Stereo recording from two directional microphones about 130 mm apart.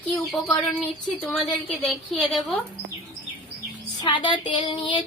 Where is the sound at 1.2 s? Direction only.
10° left (ahead or behind).